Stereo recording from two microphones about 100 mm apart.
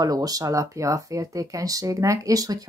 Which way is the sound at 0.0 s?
40° right (ahead or behind).